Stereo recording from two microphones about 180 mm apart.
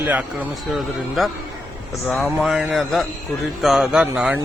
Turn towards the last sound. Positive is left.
turn(degrees=-5)  # may be behind; listen again after turning